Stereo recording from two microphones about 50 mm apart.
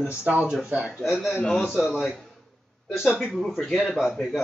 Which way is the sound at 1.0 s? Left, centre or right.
Centre.